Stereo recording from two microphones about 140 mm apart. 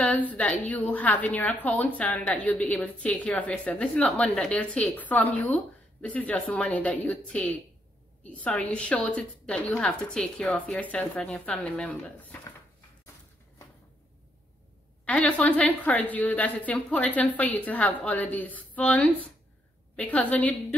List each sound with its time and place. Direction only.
0.0 s a woman's voice: 10° left (ahead or behind)
15.0 s a woman's voice: 10° left (ahead or behind)